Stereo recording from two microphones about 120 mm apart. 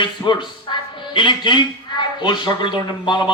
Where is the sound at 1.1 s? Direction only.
40° left (ahead or behind).